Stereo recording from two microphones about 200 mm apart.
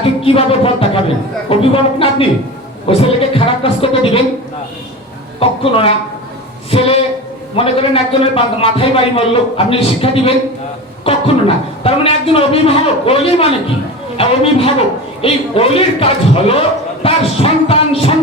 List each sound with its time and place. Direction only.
0.0 s a man's voice: 30° left (ahead or behind)
5.4 s a man's voice: 30° left (ahead or behind)